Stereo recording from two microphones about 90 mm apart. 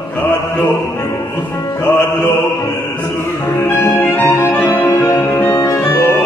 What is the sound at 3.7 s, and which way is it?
Music, 25° left (ahead or behind).